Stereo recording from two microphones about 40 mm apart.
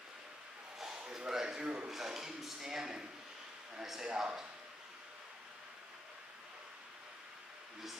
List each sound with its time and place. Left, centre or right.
0.7 s a sound: centre
1.9 s speech: centre
3.8 s speech: centre
4.1 s speech: centre